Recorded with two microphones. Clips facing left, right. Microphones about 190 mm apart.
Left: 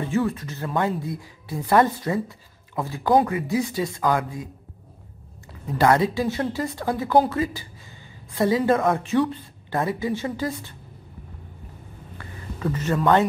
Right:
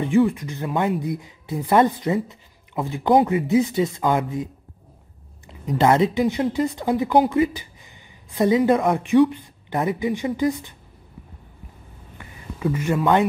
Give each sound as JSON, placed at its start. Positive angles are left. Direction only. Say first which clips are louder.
{"t": 0.0, "sound": "speech", "louder": "right 5 dB", "side_deg": -15}
{"t": 5.5, "sound": "speech", "louder": "right 1 dB", "side_deg": -20}
{"t": 12.2, "sound": "a sound", "louder": "right 3 dB", "side_deg": -10}